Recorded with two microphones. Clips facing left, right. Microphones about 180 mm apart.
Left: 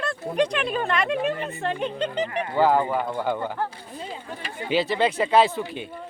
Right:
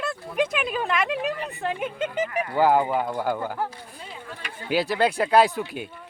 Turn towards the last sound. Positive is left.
turn(degrees=-10)  # may be behind; listen again after turning